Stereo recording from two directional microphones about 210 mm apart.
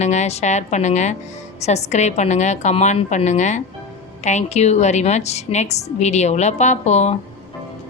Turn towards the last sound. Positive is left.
turn(degrees=30)  # may be behind; listen again after turning